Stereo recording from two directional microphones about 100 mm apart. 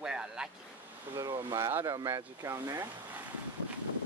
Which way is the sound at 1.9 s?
35° right (ahead or behind).